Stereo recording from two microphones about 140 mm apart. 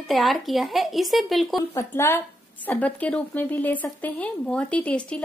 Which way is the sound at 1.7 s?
20° left (ahead or behind).